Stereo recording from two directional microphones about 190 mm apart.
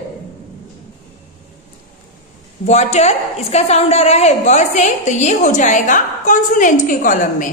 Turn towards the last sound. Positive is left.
turn(degrees=45)  # may be behind; listen again after turning